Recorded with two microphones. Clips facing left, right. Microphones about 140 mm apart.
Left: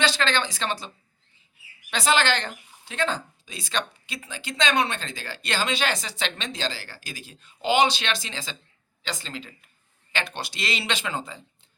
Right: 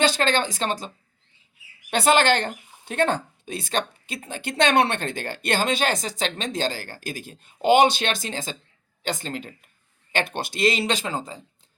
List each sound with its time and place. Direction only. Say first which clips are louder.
0.0 s speech: right 3 dB; 50° right (ahead or behind)
1.9 s speech: right 4 dB; 50° right (ahead or behind)